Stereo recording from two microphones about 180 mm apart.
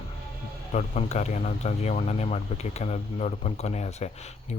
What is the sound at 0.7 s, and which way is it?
Speech, 40° left (ahead or behind).